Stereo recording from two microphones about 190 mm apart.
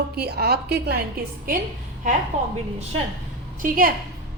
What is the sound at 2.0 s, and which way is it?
Speech, 40° right (ahead or behind).